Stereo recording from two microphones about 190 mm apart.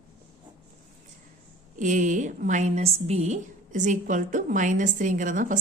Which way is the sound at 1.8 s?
40° right (ahead or behind).